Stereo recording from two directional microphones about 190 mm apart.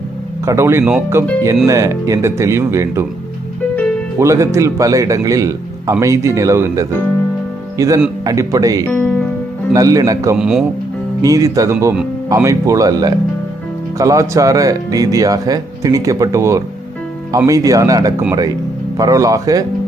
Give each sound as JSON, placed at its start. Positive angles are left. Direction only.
{"t": 0.4, "sound": "speech", "side_deg": -15}
{"t": 4.2, "sound": "a man's voice", "side_deg": -15}
{"t": 8.9, "sound": "music", "side_deg": 10}
{"t": 9.7, "sound": "speech", "side_deg": -20}
{"t": 10.3, "sound": "speech", "side_deg": -5}
{"t": 11.2, "sound": "speech", "side_deg": -15}